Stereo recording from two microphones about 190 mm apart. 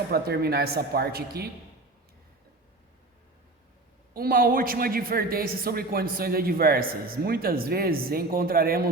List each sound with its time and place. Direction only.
0.1 s speech: 55° right (ahead or behind)
4.1 s a man's voice: 50° right (ahead or behind)